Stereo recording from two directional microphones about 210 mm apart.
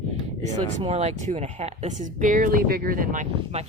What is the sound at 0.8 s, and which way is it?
Speech, 30° right (ahead or behind).